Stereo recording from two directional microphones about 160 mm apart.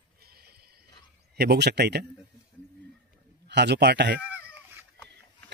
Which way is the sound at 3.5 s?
90° right.